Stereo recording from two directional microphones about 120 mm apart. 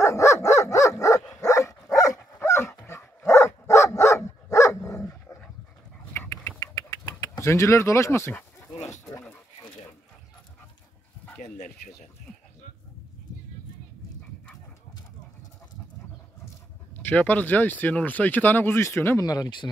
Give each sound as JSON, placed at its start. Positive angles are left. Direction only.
{"t": 0.0, "sound": "dog", "side_deg": 25}
{"t": 6.6, "sound": "bird", "side_deg": 30}
{"t": 11.5, "sound": "chicken", "side_deg": 90}
{"t": 16.9, "sound": "speech", "side_deg": 15}
{"t": 19.2, "sound": "speech", "side_deg": 30}